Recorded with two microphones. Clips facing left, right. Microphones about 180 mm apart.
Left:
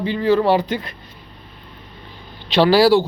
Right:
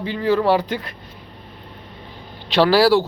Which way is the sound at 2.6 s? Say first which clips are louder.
Left 1 dB; 15° left (ahead or behind).